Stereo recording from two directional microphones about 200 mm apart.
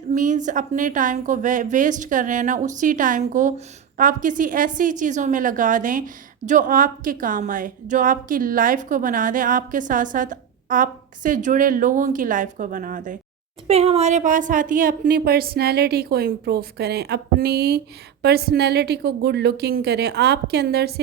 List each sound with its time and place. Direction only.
0.1 s a woman's voice: 40° right (ahead or behind)